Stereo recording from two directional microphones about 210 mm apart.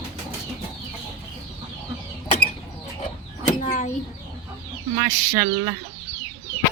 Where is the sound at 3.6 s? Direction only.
40° left (ahead or behind).